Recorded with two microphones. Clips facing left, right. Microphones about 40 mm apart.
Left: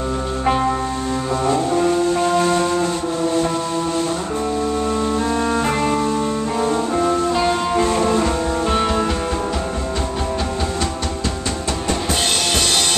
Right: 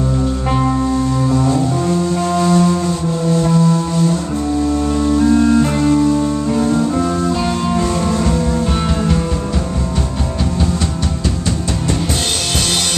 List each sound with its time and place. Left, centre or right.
0.5 s music: centre
1.3 s music: left
5.2 s music: centre
7.4 s music: left